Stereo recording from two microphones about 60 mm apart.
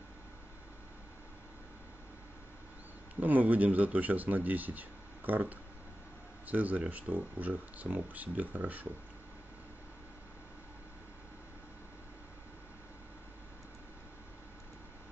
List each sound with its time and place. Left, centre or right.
3.2 s speech: right